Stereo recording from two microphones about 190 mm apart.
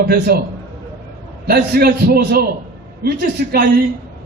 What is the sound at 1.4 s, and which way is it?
A man's voice, 55° right (ahead or behind).